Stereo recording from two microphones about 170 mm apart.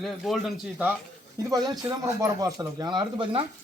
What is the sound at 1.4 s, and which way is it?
Speech, 20° right (ahead or behind).